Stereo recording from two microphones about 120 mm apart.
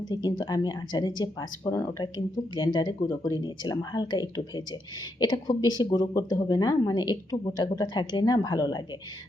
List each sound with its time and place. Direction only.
0.0 s speech: 35° left (ahead or behind)